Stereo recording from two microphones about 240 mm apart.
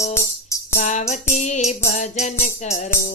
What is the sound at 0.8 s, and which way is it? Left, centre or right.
Music, left.